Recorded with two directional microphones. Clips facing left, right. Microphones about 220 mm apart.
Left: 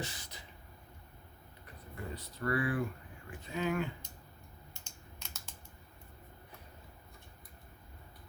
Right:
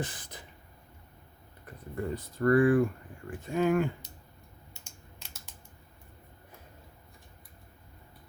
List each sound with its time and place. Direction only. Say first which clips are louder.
0.0 s speech: right 6 dB; 50° right (ahead or behind)
1.6 s speech: right 10 dB; 50° right (ahead or behind)